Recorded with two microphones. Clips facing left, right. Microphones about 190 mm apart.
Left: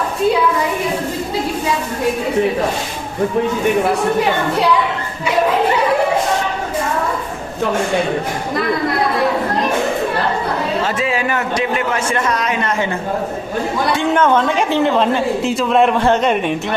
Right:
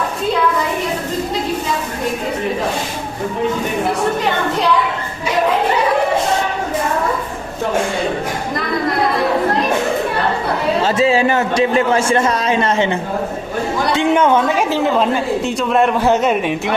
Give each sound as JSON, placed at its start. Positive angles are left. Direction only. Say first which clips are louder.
{"t": 10.8, "sound": "a man's voice", "louder": "right 5 dB", "side_deg": -30}